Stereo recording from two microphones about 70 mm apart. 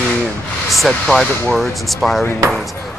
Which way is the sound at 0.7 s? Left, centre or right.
Centre.